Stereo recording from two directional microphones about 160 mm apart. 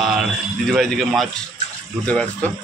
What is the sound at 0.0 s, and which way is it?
A man's voice, centre (ahead or behind).